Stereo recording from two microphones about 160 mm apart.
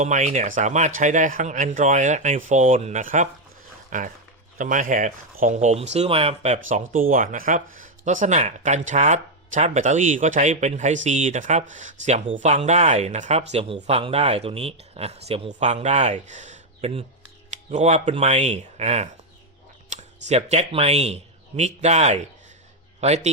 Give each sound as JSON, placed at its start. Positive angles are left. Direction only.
{"t": 0.0, "sound": "a man's voice", "side_deg": -50}
{"t": 19.9, "sound": "a sound", "side_deg": -50}
{"t": 20.2, "sound": "speech", "side_deg": -45}